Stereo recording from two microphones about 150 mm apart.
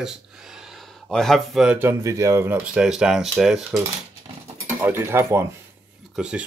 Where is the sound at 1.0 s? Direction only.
Centre (ahead or behind).